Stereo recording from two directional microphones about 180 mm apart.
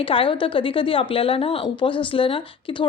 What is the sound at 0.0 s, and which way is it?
A woman's voice, 30° left (ahead or behind).